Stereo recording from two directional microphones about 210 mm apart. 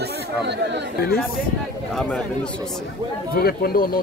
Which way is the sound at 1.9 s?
5° left (ahead or behind).